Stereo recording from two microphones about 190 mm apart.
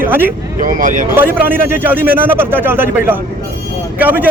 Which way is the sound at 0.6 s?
45° right (ahead or behind).